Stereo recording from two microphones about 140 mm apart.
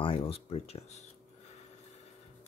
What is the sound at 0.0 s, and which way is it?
Speech, 40° left (ahead or behind).